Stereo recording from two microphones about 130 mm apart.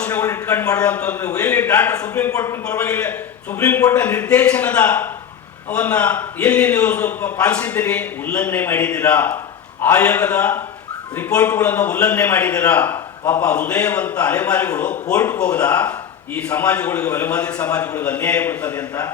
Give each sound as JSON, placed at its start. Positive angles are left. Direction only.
{"t": 0.0, "sound": "a man's voice", "side_deg": 10}
{"t": 1.9, "sound": "a man's voice", "side_deg": 25}
{"t": 2.6, "sound": "a man's voice", "side_deg": 10}